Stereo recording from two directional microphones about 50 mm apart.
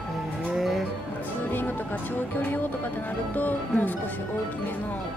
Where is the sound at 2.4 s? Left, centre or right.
Left.